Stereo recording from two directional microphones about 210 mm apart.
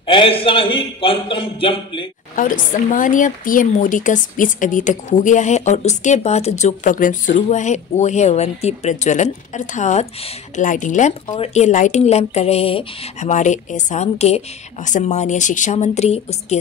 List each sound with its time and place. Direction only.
0.0 s a man's voice: 25° left (ahead or behind)
2.3 s speech: 40° left (ahead or behind)